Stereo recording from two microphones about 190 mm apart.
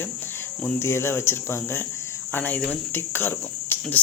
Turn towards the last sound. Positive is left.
turn(degrees=10)  # may be behind; listen again after turning